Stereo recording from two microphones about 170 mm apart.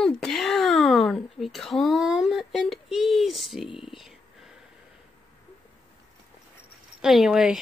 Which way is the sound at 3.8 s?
Centre (ahead or behind).